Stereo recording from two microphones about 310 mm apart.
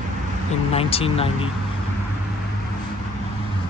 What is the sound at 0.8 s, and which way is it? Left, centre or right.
Speech, centre.